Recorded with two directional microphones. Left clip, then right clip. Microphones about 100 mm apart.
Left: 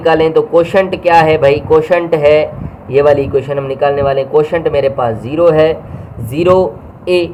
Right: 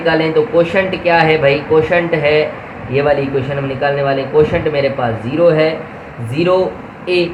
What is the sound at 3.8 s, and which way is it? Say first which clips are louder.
A man's voice: left 3 dB; 35° left (ahead or behind).